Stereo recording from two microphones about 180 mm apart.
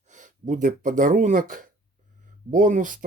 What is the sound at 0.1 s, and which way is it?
Speech, 45° right (ahead or behind).